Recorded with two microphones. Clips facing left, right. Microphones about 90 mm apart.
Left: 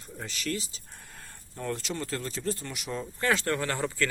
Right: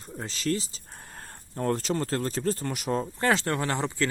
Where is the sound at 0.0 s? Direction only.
35° right (ahead or behind).